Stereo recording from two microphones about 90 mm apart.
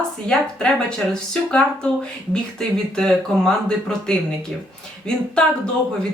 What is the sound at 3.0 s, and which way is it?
A woman's voice, 5° left (ahead or behind).